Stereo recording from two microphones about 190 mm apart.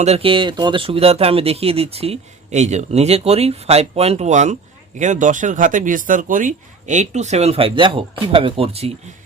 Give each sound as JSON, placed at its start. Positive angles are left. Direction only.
{"t": 0.0, "sound": "speech", "side_deg": -30}